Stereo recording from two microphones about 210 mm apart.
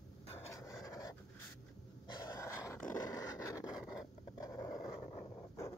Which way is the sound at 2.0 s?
15° left (ahead or behind).